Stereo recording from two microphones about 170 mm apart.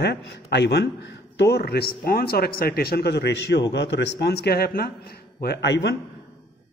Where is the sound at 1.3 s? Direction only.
75° left (ahead or behind).